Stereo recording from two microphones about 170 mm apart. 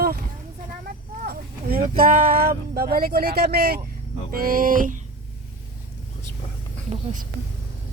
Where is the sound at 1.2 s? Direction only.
60° right (ahead or behind).